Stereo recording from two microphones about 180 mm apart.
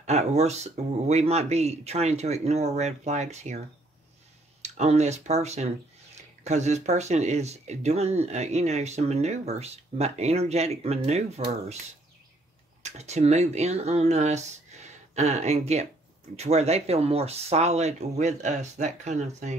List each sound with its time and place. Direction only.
0.0 s speech: 40° right (ahead or behind)
12.8 s speech: 40° right (ahead or behind)